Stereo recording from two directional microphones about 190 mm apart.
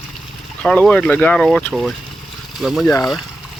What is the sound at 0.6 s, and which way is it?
Speech, 5° left (ahead or behind).